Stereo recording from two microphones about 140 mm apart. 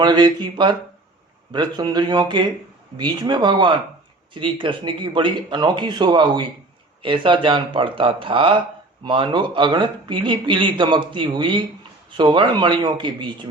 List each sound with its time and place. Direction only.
0.0 s speech: 30° right (ahead or behind)